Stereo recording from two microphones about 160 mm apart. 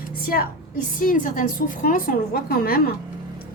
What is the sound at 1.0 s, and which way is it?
A woman's voice, 55° left (ahead or behind).